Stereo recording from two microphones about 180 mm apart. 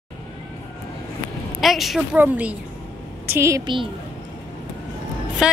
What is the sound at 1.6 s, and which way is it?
A woman's voice, centre (ahead or behind).